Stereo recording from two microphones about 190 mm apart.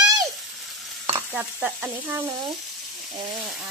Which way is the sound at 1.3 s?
10° right (ahead or behind).